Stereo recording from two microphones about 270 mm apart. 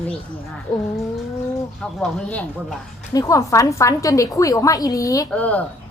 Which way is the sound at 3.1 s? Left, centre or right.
Centre.